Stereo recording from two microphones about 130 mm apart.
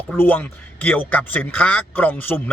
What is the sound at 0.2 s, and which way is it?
A man's voice, 15° left (ahead or behind).